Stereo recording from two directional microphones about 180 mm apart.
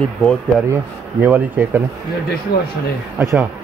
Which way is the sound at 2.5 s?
65° left (ahead or behind).